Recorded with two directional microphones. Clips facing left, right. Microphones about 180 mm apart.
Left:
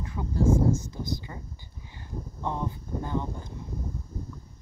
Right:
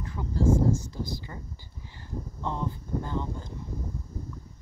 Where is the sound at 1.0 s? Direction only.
20° left (ahead or behind).